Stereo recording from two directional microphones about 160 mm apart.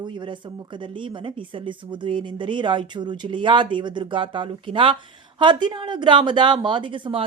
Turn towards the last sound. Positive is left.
turn(degrees=-30)  # may be behind; listen again after turning